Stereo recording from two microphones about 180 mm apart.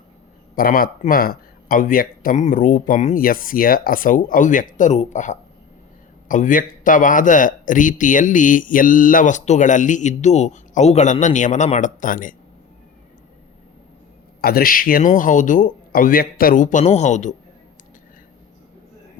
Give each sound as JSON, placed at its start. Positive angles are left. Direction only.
{"t": 0.5, "sound": "speech", "side_deg": 50}
{"t": 14.4, "sound": "speech", "side_deg": 55}